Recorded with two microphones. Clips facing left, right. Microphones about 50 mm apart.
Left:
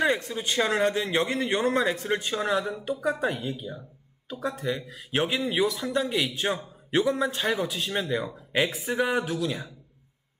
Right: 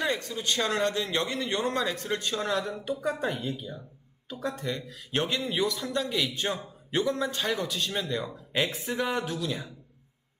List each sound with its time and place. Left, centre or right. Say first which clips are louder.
0.0 s a man's voice: left 4 dB; left
6.2 s a man's voice: left 3 dB; centre